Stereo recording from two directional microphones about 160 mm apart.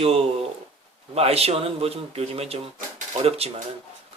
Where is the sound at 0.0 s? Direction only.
40° right (ahead or behind).